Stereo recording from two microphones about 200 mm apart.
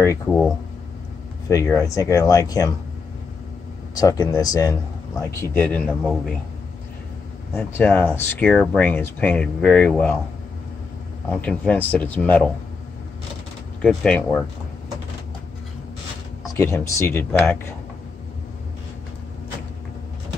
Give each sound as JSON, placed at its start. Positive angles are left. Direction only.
{"t": 0.3, "sound": "speech", "side_deg": 5}
{"t": 1.5, "sound": "speech", "side_deg": 15}
{"t": 3.9, "sound": "speech", "side_deg": 20}
{"t": 7.5, "sound": "speech", "side_deg": 10}
{"t": 11.4, "sound": "speech", "side_deg": 5}
{"t": 13.8, "sound": "speech", "side_deg": 5}
{"t": 16.5, "sound": "speech", "side_deg": 15}